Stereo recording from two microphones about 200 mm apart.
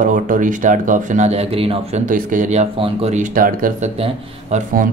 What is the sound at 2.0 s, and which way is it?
Speech, 40° right (ahead or behind).